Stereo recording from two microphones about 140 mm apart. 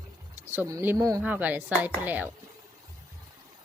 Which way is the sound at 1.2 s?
10° right (ahead or behind).